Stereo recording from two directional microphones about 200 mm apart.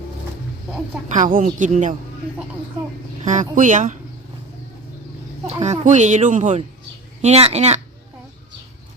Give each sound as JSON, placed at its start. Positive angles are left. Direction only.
{"t": 1.1, "sound": "a woman's voice", "side_deg": -40}
{"t": 3.2, "sound": "a woman's voice", "side_deg": -40}
{"t": 5.5, "sound": "a woman's voice", "side_deg": -35}